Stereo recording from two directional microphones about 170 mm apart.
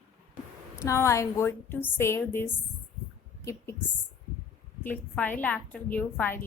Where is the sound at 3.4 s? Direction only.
15° left (ahead or behind).